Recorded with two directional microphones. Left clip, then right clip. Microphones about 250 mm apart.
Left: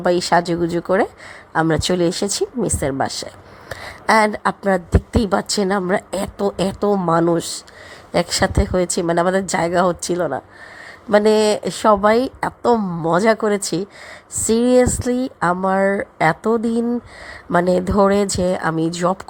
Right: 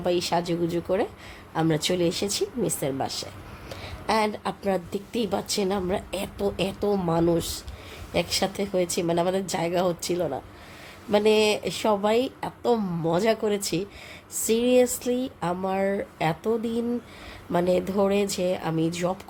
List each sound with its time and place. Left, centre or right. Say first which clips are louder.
0.0 s a woman's voice: left 9 dB; left
15.8 s speech: left 8 dB; centre
16.1 s a woman's voice: left 9 dB; left